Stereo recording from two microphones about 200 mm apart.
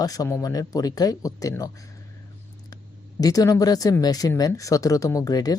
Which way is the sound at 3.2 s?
20° left (ahead or behind).